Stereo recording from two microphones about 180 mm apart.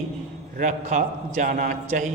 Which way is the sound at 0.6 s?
40° right (ahead or behind).